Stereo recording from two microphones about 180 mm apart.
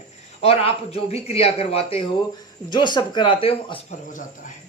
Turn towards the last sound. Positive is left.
turn(degrees=30)  # may be behind; listen again after turning